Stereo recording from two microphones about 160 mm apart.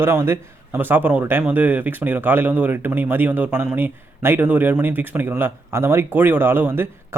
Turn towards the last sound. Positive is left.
turn(degrees=-15)  # may be behind; listen again after turning